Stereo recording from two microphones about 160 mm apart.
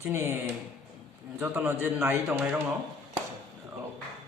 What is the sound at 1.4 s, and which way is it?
A man's voice, 15° right (ahead or behind).